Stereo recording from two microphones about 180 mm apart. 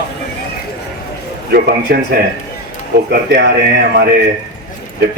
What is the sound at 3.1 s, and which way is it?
Speech, 60° right (ahead or behind).